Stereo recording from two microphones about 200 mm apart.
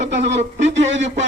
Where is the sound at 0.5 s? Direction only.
65° right (ahead or behind).